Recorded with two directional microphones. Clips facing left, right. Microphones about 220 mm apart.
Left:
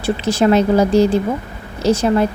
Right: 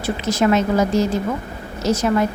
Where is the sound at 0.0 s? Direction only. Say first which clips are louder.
Left 3 dB; 30° left (ahead or behind).